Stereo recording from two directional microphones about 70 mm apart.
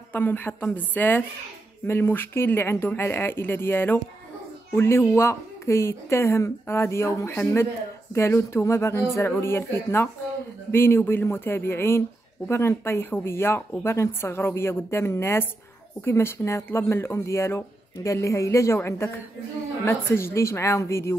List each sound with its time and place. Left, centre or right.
0.1 s a woman's voice: left